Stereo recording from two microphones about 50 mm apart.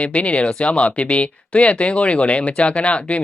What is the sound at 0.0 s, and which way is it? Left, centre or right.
Speech, left.